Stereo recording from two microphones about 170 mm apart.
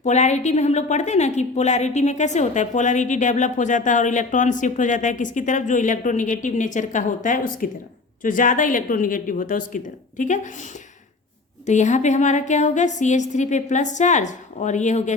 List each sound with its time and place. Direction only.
0.0 s a woman's voice: 45° left (ahead or behind)
11.6 s a woman's voice: 45° left (ahead or behind)